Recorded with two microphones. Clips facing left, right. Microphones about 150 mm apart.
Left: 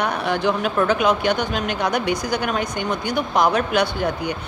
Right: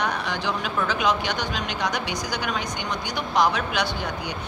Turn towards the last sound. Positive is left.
turn(degrees=55)  # may be behind; listen again after turning